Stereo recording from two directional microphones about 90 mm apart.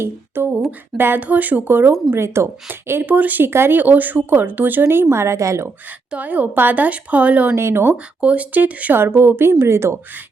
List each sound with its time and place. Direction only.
0.0 s speech: 25° right (ahead or behind)
6.1 s a woman's voice: 15° right (ahead or behind)
7.5 s speech: 30° right (ahead or behind)
8.2 s speech: 15° right (ahead or behind)